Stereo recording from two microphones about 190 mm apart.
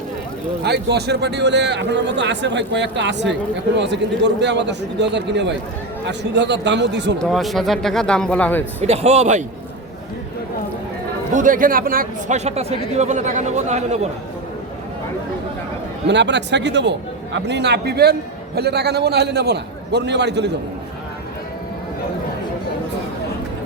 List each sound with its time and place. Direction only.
0.6 s a man's voice: 60° right (ahead or behind)
7.2 s speech: centre (ahead or behind)
8.8 s speech: 35° right (ahead or behind)
11.3 s speech: 45° right (ahead or behind)
12.5 s speech: 35° right (ahead or behind)
16.0 s a man's voice: 65° right (ahead or behind)